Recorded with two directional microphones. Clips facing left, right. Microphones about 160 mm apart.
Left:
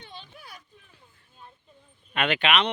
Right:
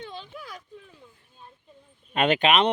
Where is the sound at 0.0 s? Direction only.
90° right.